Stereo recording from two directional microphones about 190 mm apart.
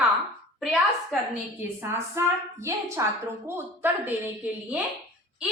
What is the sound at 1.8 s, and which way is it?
A woman's voice, 15° right (ahead or behind).